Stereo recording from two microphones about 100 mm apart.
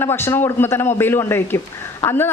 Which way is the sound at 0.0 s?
25° left (ahead or behind).